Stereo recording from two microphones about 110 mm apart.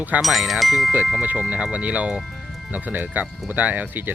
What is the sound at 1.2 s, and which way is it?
Speech, 15° right (ahead or behind).